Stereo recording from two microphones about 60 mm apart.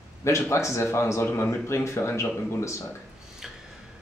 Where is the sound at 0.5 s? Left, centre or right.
Left.